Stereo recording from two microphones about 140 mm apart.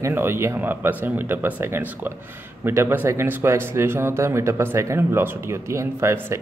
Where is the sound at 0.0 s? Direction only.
15° right (ahead or behind).